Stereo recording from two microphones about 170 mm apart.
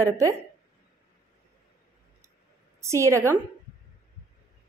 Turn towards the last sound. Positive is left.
turn(degrees=-15)  # may be behind; listen again after turning